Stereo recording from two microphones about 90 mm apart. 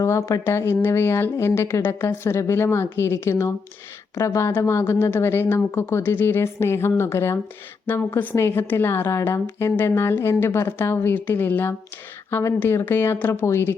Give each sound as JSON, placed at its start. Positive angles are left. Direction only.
{"t": 0.0, "sound": "speech", "side_deg": 35}
{"t": 0.4, "sound": "a woman's voice", "side_deg": 25}